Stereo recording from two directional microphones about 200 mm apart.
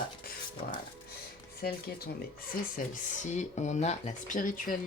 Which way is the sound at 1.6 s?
50° left (ahead or behind).